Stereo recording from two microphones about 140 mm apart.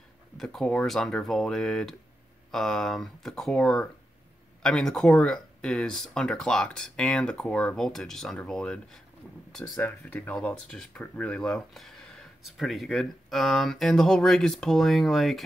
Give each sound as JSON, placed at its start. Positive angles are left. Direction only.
{"t": 0.4, "sound": "speech", "side_deg": 5}